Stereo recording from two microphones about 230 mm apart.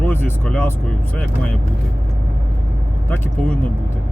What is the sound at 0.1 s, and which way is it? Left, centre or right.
Speech, centre.